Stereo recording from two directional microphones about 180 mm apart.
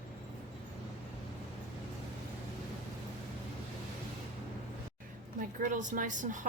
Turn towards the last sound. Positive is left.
turn(degrees=-45)  # may be behind; listen again after turning